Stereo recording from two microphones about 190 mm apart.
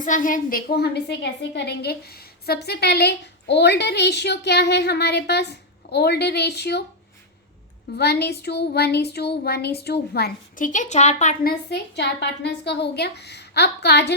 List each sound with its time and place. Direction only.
0.0 s a woman's voice: 45° left (ahead or behind); by 6.8 s 60° left (ahead or behind)
7.9 s a woman's voice: 60° left (ahead or behind); by 11.5 s 40° left (ahead or behind)
11.7 s a woman's voice: 65° left (ahead or behind)